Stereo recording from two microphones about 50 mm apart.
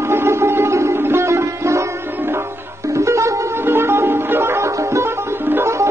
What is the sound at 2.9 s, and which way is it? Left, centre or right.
Music, right.